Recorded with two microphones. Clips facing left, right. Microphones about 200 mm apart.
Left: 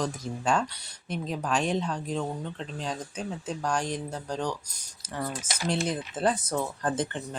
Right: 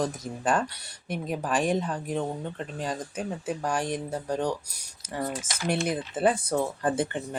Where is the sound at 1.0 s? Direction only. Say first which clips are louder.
Right 1 dB; 55° right (ahead or behind).